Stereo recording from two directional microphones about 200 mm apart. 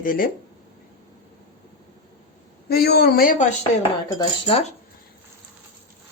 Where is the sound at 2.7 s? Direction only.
55° left (ahead or behind).